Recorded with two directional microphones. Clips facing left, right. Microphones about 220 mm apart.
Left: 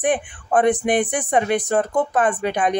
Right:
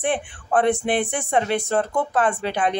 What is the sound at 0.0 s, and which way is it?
Speech, 15° left (ahead or behind).